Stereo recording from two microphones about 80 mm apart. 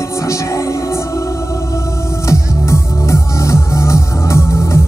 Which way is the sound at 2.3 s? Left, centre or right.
Left.